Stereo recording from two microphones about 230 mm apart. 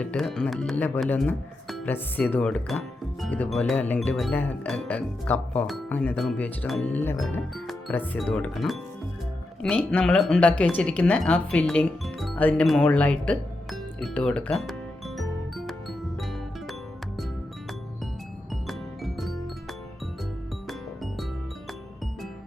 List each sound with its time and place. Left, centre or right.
0.0 s speech: centre
10.6 s music: centre
18.7 s music: centre
20.7 s music: centre